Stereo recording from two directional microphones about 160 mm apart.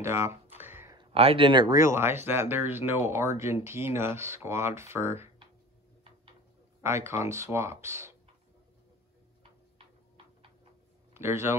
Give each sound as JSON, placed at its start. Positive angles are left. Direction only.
{"t": 0.0, "sound": "speech", "side_deg": -15}
{"t": 0.6, "sound": "a sound", "side_deg": -15}
{"t": 0.9, "sound": "speech", "side_deg": -35}
{"t": 6.8, "sound": "speech", "side_deg": -15}
{"t": 9.4, "sound": "tick-tock", "side_deg": -35}
{"t": 11.1, "sound": "speech", "side_deg": -15}